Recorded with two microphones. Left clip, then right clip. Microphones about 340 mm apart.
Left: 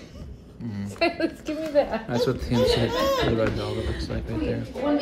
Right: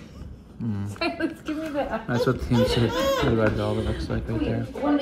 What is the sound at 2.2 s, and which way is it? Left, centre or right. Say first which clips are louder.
Speech: even; centre.